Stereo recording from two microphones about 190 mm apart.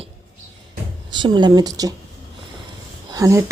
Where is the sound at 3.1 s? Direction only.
15° right (ahead or behind).